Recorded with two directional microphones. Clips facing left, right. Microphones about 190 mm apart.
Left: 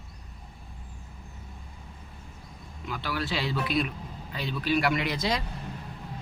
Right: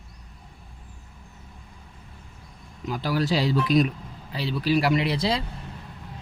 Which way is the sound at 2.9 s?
40° right (ahead or behind).